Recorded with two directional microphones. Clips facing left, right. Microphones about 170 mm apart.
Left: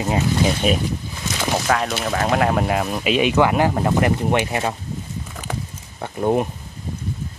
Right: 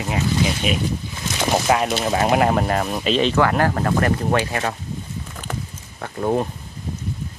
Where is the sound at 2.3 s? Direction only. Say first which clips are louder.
Left 1 dB; centre (ahead or behind); by 4.7 s 20° left (ahead or behind).